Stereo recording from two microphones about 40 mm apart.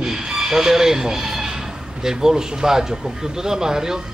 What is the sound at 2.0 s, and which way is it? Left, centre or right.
A man's voice, centre.